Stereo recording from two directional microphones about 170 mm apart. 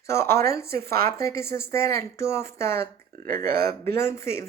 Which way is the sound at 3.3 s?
60° right (ahead or behind).